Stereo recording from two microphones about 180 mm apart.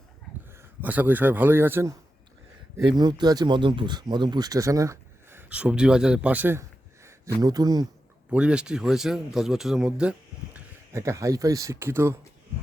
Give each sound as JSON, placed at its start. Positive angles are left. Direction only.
{"t": 0.5, "sound": "speech", "side_deg": -10}
{"t": 8.3, "sound": "speech", "side_deg": -5}
{"t": 10.9, "sound": "speech", "side_deg": -15}